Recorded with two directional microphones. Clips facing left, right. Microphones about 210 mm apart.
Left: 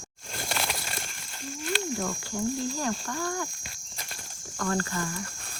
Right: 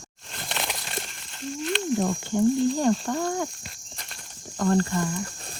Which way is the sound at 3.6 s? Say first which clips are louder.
Even; centre (ahead or behind).